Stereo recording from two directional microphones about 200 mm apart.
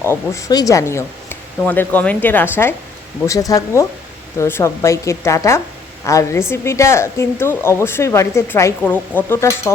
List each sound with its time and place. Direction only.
0.1 s speech: 15° left (ahead or behind)